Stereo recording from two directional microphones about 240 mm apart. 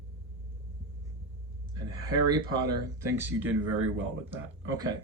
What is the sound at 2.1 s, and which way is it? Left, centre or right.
Speech, centre.